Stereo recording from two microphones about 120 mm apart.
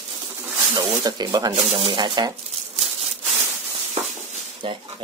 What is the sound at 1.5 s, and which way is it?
Speech, 55° right (ahead or behind).